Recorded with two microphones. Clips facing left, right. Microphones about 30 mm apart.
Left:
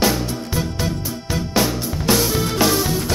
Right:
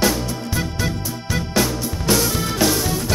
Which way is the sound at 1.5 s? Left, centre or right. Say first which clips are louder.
Left 1 dB; centre.